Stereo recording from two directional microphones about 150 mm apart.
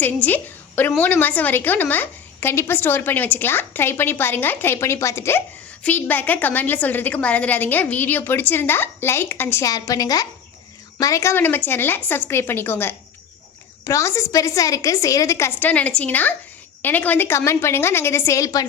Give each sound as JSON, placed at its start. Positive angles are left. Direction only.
{"t": 0.0, "sound": "a woman's voice", "side_deg": 10}